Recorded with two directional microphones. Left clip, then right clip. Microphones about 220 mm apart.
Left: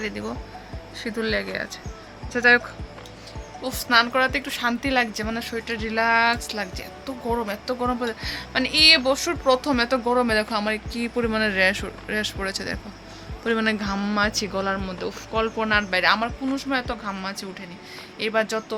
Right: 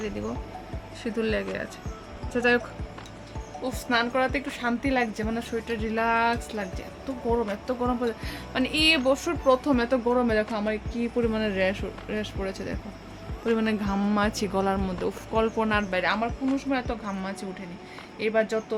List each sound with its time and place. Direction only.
1.0 s speech: 10° right (ahead or behind)
3.6 s speech: 5° right (ahead or behind)